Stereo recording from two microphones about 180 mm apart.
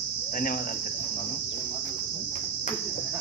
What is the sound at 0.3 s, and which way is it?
Cricket, 50° left (ahead or behind).